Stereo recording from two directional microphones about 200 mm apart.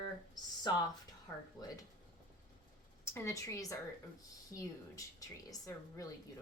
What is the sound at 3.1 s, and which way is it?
A woman's voice, 15° left (ahead or behind).